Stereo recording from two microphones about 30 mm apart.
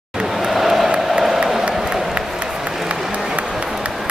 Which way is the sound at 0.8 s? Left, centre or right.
Right.